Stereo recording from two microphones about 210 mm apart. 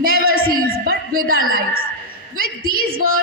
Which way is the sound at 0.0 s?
45° right (ahead or behind).